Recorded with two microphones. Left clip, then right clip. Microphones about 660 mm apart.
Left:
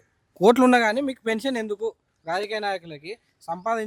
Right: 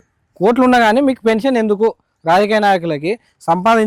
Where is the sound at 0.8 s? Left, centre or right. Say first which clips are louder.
Right 10 dB; centre.